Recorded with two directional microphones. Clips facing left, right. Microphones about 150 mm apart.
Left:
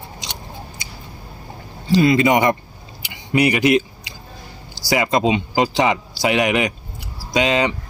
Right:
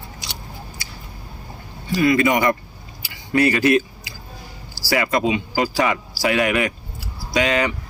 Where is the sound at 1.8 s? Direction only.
25° left (ahead or behind).